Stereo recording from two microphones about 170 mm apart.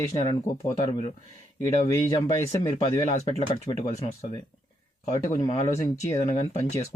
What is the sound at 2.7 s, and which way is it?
Speech, 40° left (ahead or behind).